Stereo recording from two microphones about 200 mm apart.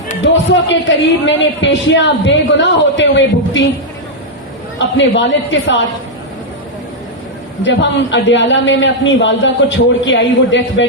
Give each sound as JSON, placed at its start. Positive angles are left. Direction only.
{"t": 0.7, "sound": "a man's voice", "side_deg": 65}
{"t": 4.9, "sound": "a man's voice", "side_deg": 65}
{"t": 7.6, "sound": "a man's voice", "side_deg": 65}